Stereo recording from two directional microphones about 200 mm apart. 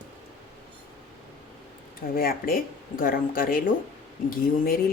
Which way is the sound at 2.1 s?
45° left (ahead or behind).